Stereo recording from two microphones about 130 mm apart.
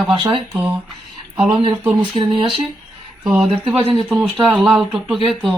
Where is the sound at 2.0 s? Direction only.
40° right (ahead or behind).